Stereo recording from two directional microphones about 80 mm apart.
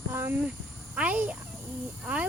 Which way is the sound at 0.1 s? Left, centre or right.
Right.